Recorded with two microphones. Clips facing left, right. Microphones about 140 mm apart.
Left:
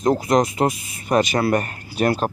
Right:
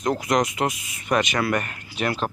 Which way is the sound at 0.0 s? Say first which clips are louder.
Left 4 dB; 30° left (ahead or behind).